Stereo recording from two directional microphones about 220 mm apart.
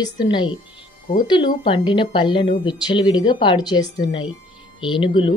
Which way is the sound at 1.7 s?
20° left (ahead or behind).